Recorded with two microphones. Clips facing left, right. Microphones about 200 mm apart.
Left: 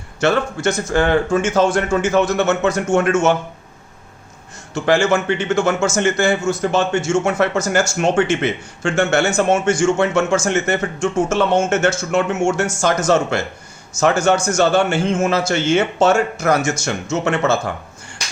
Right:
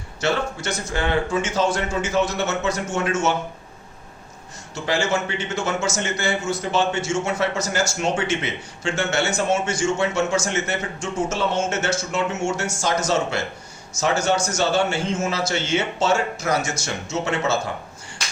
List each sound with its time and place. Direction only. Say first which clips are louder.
0.2 s a man's voice: left 6 dB; 50° left (ahead or behind)
4.7 s a man's voice: left 7 dB; 50° left (ahead or behind)